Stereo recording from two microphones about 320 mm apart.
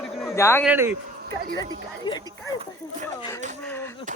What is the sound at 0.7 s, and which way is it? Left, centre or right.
Speech, centre.